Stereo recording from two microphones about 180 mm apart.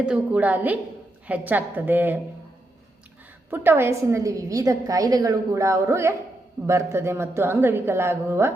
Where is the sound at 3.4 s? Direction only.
10° right (ahead or behind).